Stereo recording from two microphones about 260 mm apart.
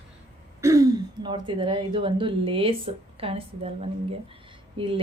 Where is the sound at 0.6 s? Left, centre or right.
Centre.